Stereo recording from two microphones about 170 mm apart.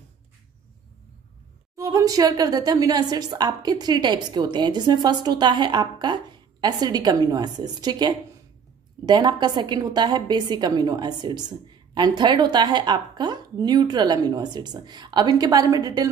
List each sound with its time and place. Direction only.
1.8 s a woman's voice: 20° right (ahead or behind)